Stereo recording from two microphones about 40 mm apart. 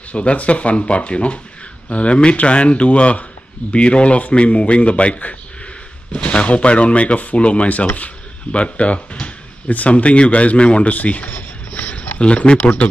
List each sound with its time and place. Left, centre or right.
0.1 s a man's voice: left